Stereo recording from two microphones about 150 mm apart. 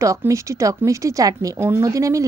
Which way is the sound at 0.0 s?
20° right (ahead or behind).